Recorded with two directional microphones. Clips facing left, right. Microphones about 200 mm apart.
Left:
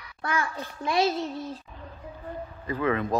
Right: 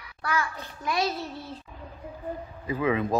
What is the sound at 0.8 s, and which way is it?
Music, 25° left (ahead or behind).